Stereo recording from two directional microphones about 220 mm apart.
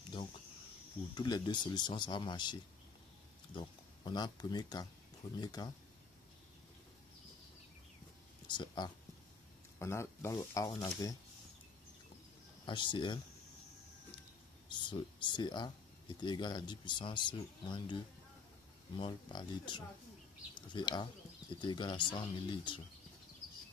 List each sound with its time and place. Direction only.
1.1 s speech: 20° left (ahead or behind)
8.5 s speech: 20° left (ahead or behind)
12.6 s speech: 20° left (ahead or behind)
14.7 s speech: 20° left (ahead or behind)